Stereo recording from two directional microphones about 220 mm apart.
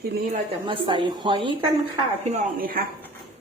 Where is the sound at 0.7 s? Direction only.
20° right (ahead or behind).